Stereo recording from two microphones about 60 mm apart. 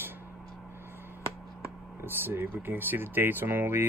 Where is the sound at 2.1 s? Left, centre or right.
Right.